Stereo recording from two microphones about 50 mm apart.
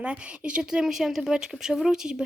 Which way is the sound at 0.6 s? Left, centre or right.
Centre.